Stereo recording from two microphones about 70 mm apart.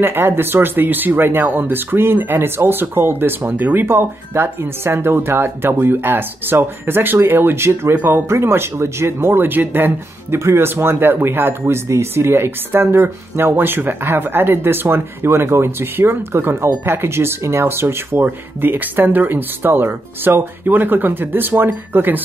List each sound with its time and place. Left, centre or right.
0.0 s speech: right